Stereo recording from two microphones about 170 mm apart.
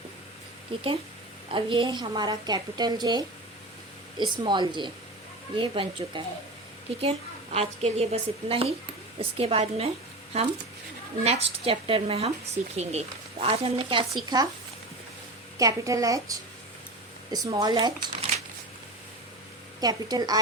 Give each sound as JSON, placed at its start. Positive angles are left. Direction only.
{"t": 0.7, "sound": "a woman's voice", "side_deg": -30}
{"t": 15.5, "sound": "a woman's voice", "side_deg": -20}
{"t": 19.8, "sound": "a woman's voice", "side_deg": -25}